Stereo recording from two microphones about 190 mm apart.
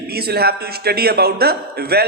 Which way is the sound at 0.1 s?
55° right (ahead or behind).